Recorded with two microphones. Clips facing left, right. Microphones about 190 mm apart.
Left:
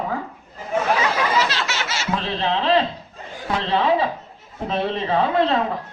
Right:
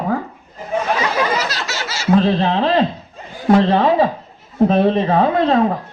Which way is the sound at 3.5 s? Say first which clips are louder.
Right 7 dB; 45° right (ahead or behind).